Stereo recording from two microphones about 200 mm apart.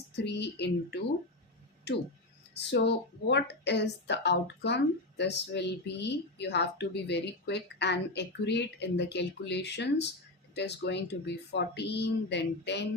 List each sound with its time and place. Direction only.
0.2 s speech: 60° left (ahead or behind)